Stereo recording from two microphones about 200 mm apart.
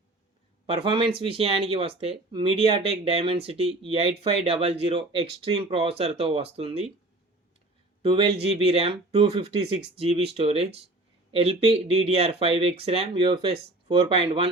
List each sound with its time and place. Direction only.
0.7 s speech: 25° right (ahead or behind)
8.0 s speech: 25° right (ahead or behind)